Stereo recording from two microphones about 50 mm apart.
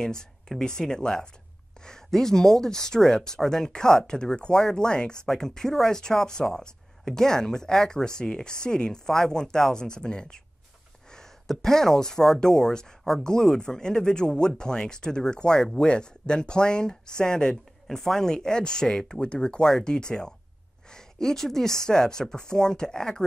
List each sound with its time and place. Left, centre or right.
0.0 s a woman's voice: centre